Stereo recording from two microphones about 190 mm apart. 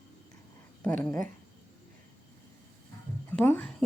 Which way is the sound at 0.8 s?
5° left (ahead or behind).